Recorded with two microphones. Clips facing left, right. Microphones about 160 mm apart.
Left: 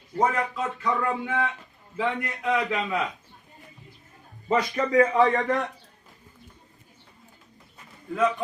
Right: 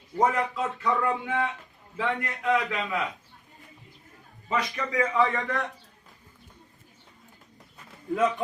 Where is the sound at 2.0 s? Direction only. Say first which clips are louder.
Left 1 dB; 15° left (ahead or behind).